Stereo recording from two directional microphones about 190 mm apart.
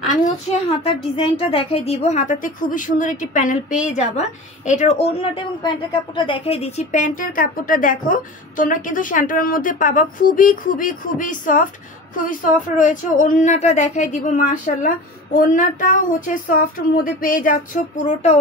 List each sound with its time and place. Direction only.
0.1 s a woman's voice: 45° left (ahead or behind)
0.8 s a woman's voice: 30° left (ahead or behind)